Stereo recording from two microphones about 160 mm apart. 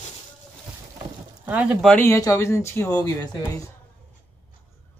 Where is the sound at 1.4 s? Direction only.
10° right (ahead or behind).